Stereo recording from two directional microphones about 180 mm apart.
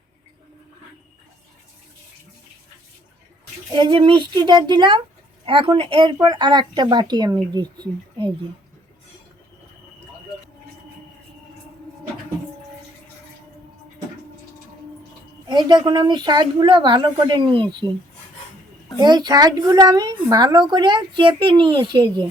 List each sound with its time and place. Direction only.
3.8 s a child's voice: 25° right (ahead or behind)
15.4 s a child's voice: 25° right (ahead or behind)
18.9 s a child's voice: 25° right (ahead or behind)